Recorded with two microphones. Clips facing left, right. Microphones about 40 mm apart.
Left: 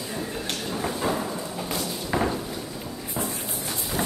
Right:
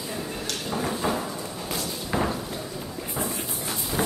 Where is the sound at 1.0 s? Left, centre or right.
Centre.